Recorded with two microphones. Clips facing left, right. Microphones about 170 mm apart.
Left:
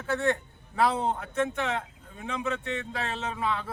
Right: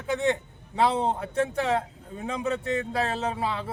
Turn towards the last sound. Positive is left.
turn(degrees=-30)  # may be behind; listen again after turning